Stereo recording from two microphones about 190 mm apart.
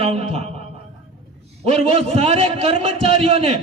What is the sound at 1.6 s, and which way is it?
A man's voice, 35° right (ahead or behind).